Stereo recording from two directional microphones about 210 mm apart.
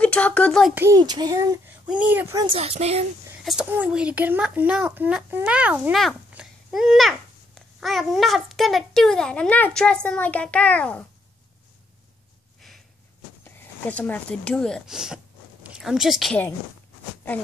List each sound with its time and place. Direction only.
0.0 s a child's voice: 5° left (ahead or behind)
0.7 s a child's voice: 15° right (ahead or behind)
3.4 s a child's voice: 5° right (ahead or behind)
13.4 s a woman's voice: 10° left (ahead or behind)